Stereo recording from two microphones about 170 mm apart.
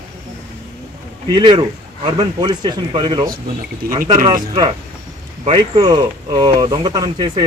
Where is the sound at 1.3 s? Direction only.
25° right (ahead or behind).